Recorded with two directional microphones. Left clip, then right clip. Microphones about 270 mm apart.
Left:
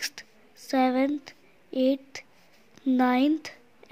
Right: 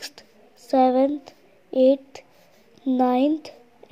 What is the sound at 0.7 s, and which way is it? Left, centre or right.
Speech, left.